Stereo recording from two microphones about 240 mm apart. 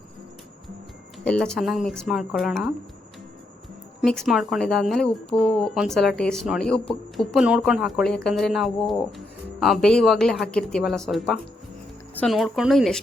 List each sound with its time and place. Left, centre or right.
1.2 s speech: centre
4.0 s speech: centre